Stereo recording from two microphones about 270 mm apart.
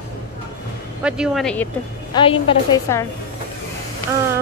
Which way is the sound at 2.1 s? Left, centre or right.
Centre.